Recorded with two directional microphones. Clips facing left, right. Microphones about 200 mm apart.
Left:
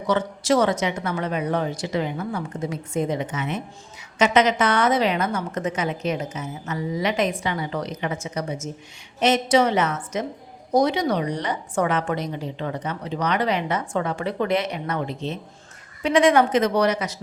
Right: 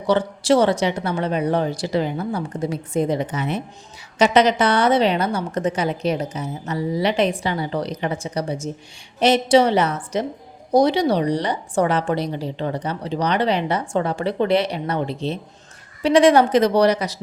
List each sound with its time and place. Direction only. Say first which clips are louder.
0.1 s a woman's voice: right 4 dB; 30° right (ahead or behind)